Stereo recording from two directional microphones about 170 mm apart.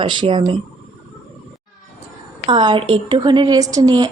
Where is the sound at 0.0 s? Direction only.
30° right (ahead or behind).